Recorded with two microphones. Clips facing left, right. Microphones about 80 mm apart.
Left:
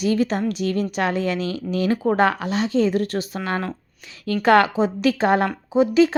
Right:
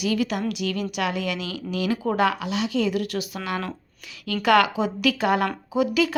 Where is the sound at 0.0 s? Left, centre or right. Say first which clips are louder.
Left 4 dB; left.